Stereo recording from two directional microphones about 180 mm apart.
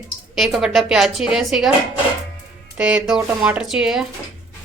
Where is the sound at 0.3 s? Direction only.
Centre (ahead or behind).